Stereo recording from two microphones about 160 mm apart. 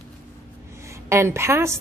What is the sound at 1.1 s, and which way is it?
Speech, 15° right (ahead or behind).